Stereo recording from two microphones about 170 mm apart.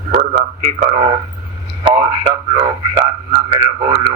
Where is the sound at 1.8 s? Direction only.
35° right (ahead or behind).